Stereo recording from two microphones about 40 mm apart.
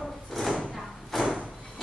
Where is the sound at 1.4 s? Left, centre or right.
Centre.